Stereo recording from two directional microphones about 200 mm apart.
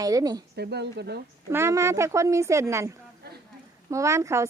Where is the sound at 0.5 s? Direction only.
55° right (ahead or behind).